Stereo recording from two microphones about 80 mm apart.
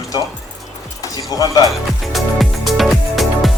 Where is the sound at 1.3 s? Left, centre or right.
Left.